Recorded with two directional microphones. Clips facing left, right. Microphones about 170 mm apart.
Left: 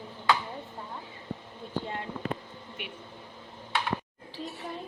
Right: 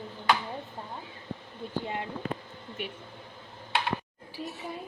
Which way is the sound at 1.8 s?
15° right (ahead or behind).